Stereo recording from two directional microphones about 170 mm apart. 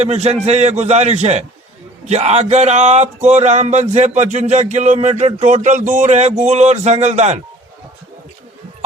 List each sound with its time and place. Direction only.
0.0 s speech: 40° right (ahead or behind)